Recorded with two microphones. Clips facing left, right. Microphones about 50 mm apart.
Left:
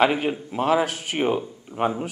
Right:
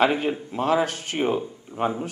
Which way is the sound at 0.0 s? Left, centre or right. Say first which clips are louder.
Left 1 dB; centre.